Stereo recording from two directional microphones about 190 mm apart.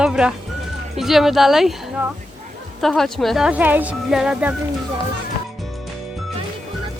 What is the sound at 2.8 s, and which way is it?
Speech, centre (ahead or behind).